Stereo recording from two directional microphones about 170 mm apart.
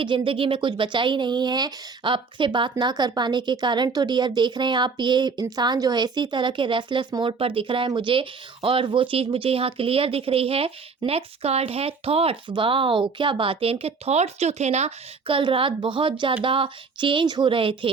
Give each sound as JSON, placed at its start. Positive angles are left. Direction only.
{"t": 0.3, "sound": "speech", "side_deg": -30}